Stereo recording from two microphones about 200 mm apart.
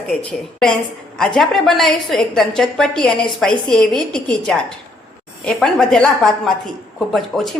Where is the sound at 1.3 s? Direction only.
Centre (ahead or behind).